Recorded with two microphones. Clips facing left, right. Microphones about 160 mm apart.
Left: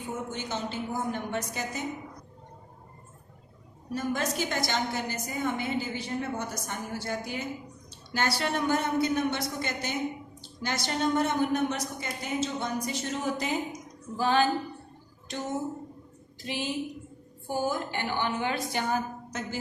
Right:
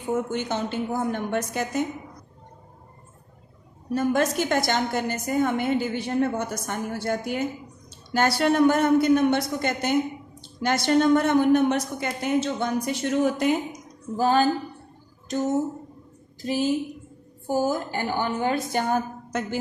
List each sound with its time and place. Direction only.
0.3 s a woman's voice: 55° right (ahead or behind)
3.9 s a woman's voice: 55° right (ahead or behind)
14.2 s a woman's voice: 40° right (ahead or behind); by 19.5 s 55° right (ahead or behind)